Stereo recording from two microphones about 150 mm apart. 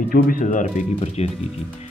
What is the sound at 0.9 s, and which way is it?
Speech, 45° left (ahead or behind).